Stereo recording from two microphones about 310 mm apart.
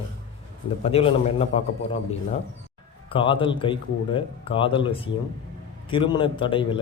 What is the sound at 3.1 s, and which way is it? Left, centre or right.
A man's voice, centre.